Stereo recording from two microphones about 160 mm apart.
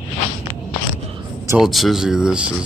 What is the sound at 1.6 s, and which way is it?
Speech, centre (ahead or behind).